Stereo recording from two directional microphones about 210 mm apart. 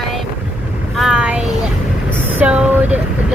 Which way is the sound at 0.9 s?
Centre (ahead or behind).